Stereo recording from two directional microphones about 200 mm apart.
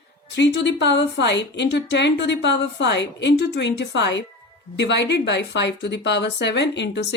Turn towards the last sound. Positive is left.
turn(degrees=60)  # may be behind; listen again after turning